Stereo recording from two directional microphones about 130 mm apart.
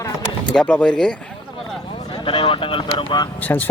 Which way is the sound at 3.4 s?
15° left (ahead or behind).